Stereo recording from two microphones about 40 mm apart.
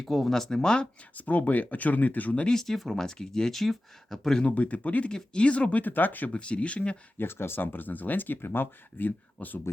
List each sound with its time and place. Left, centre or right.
0.0 s speech: centre
0.3 s speech: centre
1.1 s speech: left
2.5 s speech: centre
3.5 s speech: centre
4.4 s speech: left
5.1 s speech: left
5.8 s speech: left
6.3 s speech: left
7.2 s speech: left
7.6 s speech: left